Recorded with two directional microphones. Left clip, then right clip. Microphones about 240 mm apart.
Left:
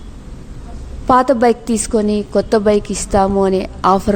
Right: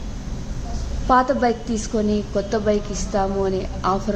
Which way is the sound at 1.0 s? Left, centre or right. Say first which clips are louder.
Left 6 dB; left.